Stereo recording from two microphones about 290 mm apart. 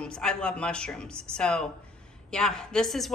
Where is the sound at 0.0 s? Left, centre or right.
Centre.